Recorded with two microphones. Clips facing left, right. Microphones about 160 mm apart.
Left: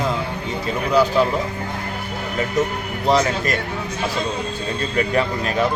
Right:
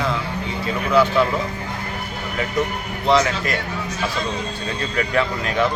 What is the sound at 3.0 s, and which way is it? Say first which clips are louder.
Speech: even; 40° left (ahead or behind).